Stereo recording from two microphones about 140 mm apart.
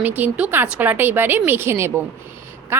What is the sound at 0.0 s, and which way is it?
A woman's voice, 10° right (ahead or behind).